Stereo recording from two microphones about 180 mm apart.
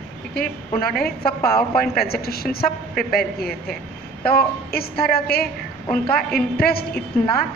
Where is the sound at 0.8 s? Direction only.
55° left (ahead or behind).